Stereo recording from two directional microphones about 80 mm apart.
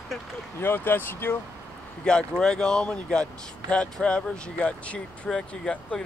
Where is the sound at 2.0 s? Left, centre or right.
Centre.